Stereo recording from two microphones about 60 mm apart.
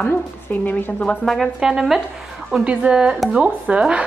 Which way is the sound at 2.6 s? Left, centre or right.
Centre.